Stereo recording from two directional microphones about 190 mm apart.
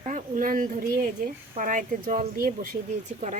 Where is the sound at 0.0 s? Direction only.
45° right (ahead or behind).